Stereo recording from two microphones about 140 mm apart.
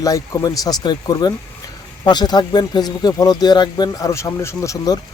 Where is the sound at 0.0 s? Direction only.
25° left (ahead or behind).